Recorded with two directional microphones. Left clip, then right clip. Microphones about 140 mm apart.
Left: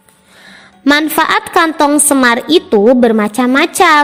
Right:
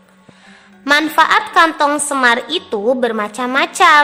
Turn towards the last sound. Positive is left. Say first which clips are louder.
# left 2 dB
turn(degrees=45)  # may be behind; listen again after turning